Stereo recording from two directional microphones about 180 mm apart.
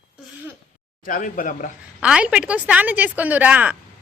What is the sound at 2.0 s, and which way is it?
A woman's voice, 5° right (ahead or behind).